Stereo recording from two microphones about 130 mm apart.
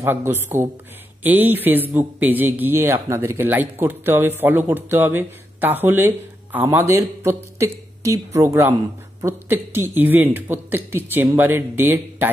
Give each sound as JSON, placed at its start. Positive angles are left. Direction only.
{"t": 0.0, "sound": "a man's voice", "side_deg": -15}